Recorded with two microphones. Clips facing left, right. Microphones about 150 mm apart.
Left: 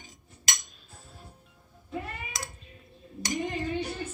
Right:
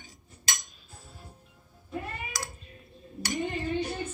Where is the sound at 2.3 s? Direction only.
25° left (ahead or behind).